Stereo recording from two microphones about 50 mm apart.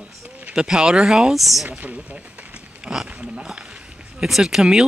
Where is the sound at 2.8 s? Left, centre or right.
Centre.